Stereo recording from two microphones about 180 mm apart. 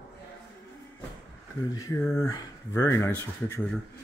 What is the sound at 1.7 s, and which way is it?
Speech, 20° left (ahead or behind).